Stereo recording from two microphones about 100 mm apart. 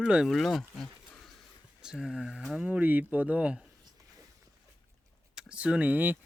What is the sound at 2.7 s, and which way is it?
Speech, 15° right (ahead or behind).